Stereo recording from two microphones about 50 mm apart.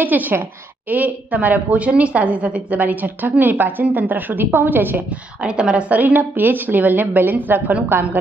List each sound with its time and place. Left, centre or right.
0.0 s a woman's voice: right
5.4 s a woman's voice: centre
5.9 s a woman's voice: right